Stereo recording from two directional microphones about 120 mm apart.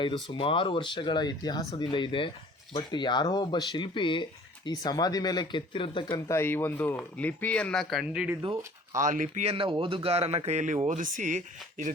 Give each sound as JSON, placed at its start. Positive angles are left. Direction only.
{"t": 0.0, "sound": "speech", "side_deg": 45}
{"t": 6.2, "sound": "speech", "side_deg": 20}
{"t": 8.0, "sound": "speech", "side_deg": -10}
{"t": 9.0, "sound": "speech", "side_deg": -90}
{"t": 9.6, "sound": "speech", "side_deg": -45}